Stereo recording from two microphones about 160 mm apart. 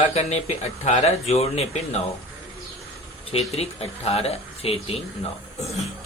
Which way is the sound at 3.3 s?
40° left (ahead or behind).